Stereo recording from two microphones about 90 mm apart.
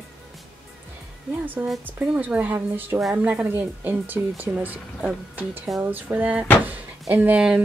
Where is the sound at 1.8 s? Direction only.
20° right (ahead or behind).